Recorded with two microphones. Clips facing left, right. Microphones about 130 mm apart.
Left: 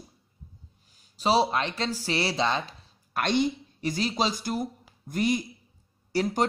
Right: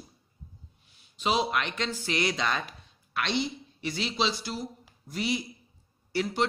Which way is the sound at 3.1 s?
45° left (ahead or behind).